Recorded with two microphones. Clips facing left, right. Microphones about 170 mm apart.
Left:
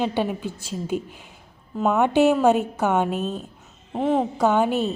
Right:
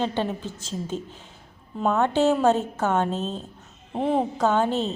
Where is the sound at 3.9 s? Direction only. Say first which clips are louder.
Left 2 dB; centre (ahead or behind).